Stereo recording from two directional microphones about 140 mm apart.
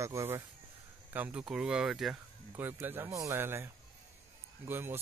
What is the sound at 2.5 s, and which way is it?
Speech, 15° right (ahead or behind).